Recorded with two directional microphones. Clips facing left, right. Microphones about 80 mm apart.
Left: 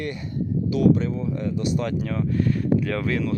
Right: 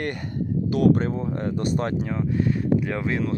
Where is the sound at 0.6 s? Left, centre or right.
Right.